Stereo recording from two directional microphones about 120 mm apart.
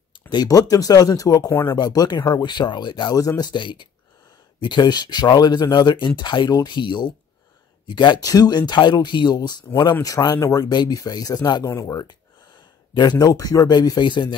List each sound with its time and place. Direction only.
0.3 s speech: 35° left (ahead or behind)
1.5 s speech: 20° left (ahead or behind)
1.8 s speech: 35° left (ahead or behind)